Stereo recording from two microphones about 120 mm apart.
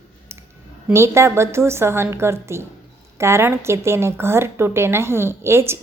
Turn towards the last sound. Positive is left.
turn(degrees=-20)  # may be behind; listen again after turning